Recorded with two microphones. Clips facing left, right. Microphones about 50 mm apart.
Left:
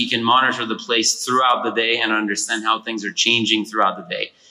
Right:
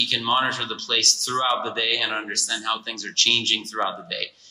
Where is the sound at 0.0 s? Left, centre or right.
Left.